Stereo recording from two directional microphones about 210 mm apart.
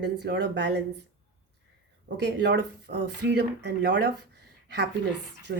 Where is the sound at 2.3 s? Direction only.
55° right (ahead or behind).